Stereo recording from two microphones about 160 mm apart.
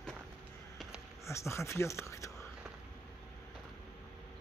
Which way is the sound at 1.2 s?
15° left (ahead or behind).